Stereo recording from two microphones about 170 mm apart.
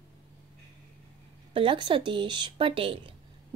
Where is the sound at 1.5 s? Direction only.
30° right (ahead or behind).